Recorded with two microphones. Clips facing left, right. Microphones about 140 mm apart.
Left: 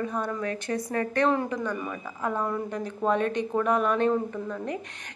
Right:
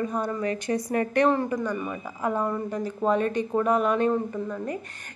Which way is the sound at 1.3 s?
5° right (ahead or behind).